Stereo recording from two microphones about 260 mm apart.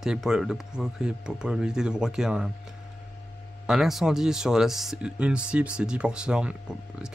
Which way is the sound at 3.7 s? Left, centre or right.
Centre.